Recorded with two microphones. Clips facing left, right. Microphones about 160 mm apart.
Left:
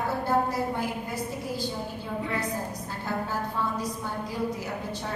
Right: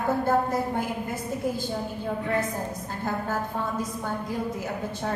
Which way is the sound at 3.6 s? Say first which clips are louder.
Even; 50° right (ahead or behind).